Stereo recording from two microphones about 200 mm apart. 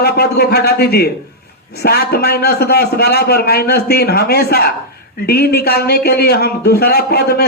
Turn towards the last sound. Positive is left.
turn(degrees=50)  # may be behind; listen again after turning